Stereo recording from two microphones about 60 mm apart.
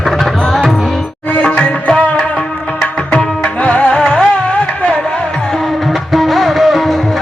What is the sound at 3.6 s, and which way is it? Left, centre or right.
Music, left.